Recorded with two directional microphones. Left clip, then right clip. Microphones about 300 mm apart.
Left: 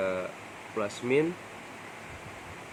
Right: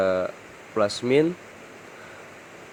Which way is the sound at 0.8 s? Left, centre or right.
Right.